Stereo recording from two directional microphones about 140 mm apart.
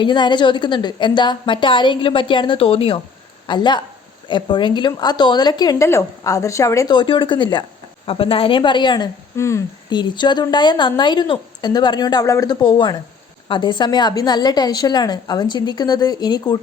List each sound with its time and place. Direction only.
0.0 s a woman's voice: 35° left (ahead or behind)
6.9 s a woman's voice: 35° left (ahead or behind)
9.3 s a woman's voice: 20° left (ahead or behind)
9.9 s a woman's voice: 30° left (ahead or behind)